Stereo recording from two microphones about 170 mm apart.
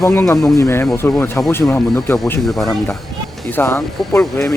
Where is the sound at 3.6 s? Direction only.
10° left (ahead or behind).